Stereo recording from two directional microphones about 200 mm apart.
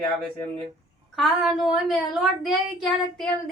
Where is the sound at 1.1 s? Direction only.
Centre (ahead or behind).